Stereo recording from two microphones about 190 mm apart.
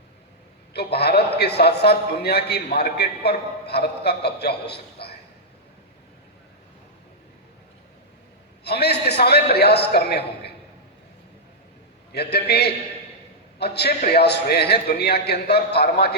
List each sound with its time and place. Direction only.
0.7 s a man's voice: 60° left (ahead or behind)
8.6 s a man's voice: 60° left (ahead or behind)
12.1 s a man's voice: 60° left (ahead or behind)